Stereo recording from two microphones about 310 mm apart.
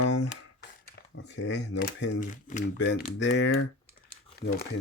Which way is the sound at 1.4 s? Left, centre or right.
Left.